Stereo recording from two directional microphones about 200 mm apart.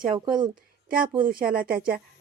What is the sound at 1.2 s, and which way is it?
Speech, 45° right (ahead or behind).